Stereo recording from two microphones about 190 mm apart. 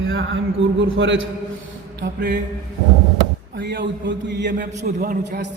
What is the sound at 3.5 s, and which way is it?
A man's voice, 70° right (ahead or behind).